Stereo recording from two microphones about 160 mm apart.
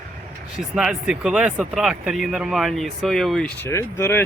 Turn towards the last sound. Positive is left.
turn(degrees=15)  # may be behind; listen again after turning